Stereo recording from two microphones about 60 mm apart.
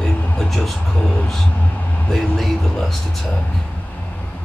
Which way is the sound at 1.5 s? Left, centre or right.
Left.